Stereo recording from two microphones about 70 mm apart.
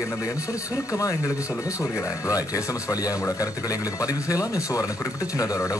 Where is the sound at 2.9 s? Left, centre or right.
Left.